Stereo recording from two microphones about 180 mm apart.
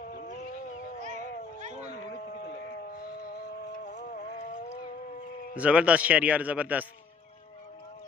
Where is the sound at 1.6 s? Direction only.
40° right (ahead or behind).